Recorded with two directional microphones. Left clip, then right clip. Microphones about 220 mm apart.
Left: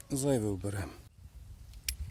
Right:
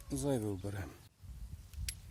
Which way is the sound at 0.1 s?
40° left (ahead or behind).